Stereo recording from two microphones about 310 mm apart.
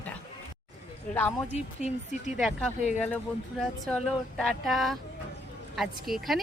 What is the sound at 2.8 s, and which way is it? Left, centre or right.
Speech, left.